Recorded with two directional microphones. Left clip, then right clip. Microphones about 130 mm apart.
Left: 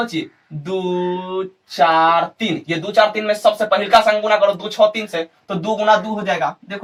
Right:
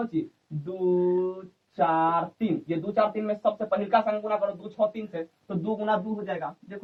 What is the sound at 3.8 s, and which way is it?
Speech, 50° left (ahead or behind).